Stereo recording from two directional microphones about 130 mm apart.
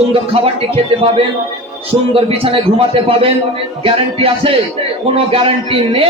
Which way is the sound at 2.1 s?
45° right (ahead or behind).